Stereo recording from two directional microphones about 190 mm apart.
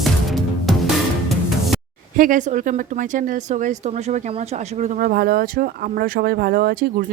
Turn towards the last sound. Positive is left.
turn(degrees=-50)  # may be behind; listen again after turning